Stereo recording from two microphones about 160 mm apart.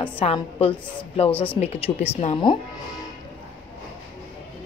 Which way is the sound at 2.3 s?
30° left (ahead or behind).